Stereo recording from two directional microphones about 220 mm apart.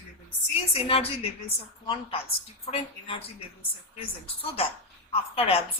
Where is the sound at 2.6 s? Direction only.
25° left (ahead or behind).